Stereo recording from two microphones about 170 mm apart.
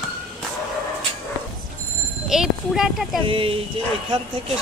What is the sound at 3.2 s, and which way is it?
Speech, 30° right (ahead or behind).